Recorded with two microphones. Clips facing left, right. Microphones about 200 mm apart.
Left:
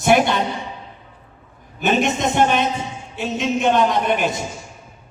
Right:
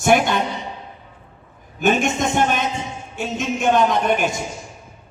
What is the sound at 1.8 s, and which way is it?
Speech, 50° right (ahead or behind).